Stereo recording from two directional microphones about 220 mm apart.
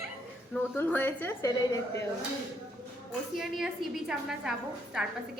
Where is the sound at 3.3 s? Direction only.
Centre (ahead or behind).